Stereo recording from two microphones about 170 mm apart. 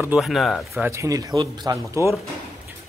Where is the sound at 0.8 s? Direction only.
15° right (ahead or behind).